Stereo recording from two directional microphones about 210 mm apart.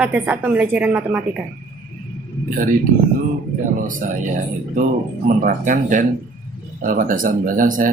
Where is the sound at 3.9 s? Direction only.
40° right (ahead or behind).